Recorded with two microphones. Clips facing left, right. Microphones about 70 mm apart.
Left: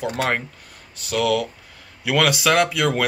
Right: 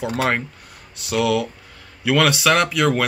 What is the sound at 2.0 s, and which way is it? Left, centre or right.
Speech, centre.